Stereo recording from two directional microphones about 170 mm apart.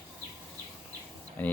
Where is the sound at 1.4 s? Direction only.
10° left (ahead or behind).